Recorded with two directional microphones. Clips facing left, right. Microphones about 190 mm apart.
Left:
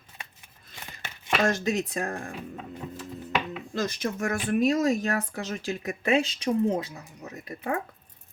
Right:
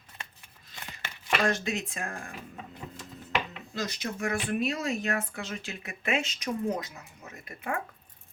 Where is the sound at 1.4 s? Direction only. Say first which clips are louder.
Left 5 dB; 40° left (ahead or behind).